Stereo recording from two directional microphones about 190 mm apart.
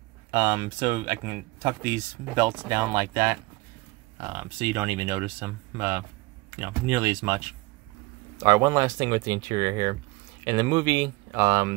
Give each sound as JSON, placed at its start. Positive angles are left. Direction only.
{"t": 0.3, "sound": "speech", "side_deg": -15}